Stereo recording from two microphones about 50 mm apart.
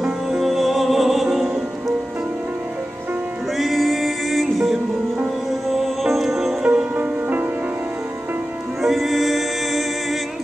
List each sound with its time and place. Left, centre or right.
0.0 s music: centre
3.5 s music: centre
6.6 s music: centre
7.0 s music: right
8.8 s music: centre